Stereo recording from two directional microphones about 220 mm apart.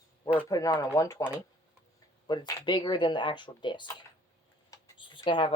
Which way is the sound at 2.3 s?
20° left (ahead or behind).